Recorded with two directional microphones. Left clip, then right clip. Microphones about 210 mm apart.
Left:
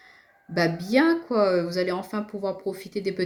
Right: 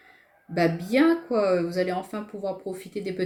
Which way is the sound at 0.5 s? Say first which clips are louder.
Left 1 dB; 50° left (ahead or behind).